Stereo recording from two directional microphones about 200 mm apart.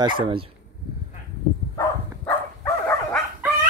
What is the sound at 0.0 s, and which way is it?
Speech, 25° right (ahead or behind).